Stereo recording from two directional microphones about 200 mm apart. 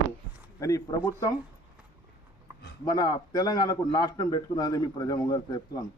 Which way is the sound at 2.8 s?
20° left (ahead or behind).